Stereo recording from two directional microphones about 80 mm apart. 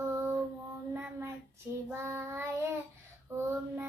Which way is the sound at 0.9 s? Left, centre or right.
Right.